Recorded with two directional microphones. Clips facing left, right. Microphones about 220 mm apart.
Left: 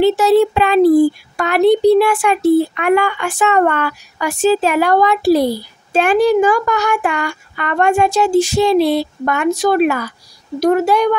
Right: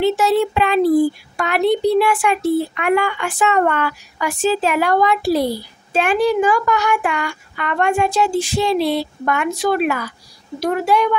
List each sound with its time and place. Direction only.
0.0 s a child's voice: 35° left (ahead or behind)